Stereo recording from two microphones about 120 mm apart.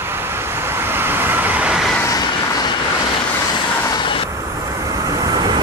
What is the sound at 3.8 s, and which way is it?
Vehicle, 40° left (ahead or behind).